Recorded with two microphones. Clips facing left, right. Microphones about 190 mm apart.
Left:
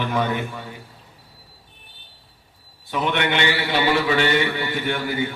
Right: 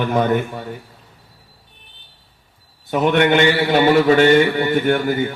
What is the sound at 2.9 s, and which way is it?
A man's voice, 45° right (ahead or behind).